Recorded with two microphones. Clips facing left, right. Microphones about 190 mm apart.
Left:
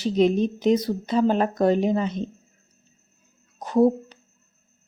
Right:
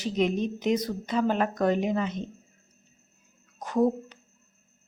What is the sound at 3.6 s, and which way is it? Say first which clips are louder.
Speech: left 5 dB; 30° left (ahead or behind).